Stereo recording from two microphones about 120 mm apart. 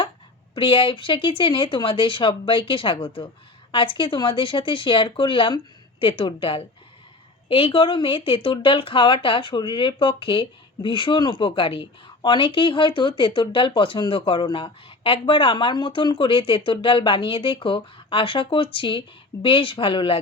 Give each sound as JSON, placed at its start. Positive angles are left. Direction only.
{"t": 0.5, "sound": "a woman's voice", "side_deg": 45}